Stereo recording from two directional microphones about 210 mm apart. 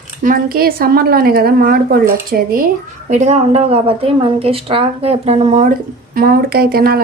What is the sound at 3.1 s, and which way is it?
Speech, 35° right (ahead or behind).